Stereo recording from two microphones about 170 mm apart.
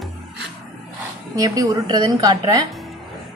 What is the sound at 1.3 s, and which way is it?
A woman's voice, 20° right (ahead or behind).